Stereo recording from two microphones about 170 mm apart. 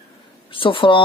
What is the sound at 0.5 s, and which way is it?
Speech, 30° left (ahead or behind).